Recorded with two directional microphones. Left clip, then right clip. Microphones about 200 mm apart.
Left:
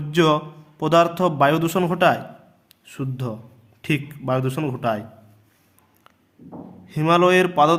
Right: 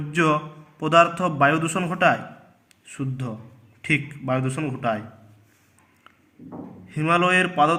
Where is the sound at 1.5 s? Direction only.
55° left (ahead or behind).